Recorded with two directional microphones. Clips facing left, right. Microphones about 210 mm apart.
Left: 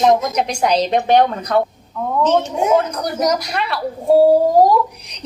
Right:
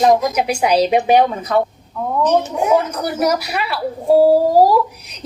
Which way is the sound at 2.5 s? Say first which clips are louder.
Even; 25° left (ahead or behind).